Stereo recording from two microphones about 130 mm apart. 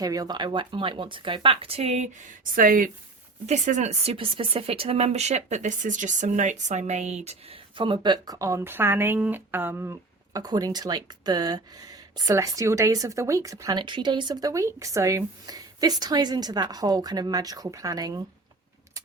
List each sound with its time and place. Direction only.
0.0 s speech: 30° right (ahead or behind); by 2.0 s 55° right (ahead or behind)
2.6 s speech: 90° right
3.4 s speech: 65° right (ahead or behind)
7.3 s speech: 45° right (ahead or behind); by 18.2 s 25° right (ahead or behind)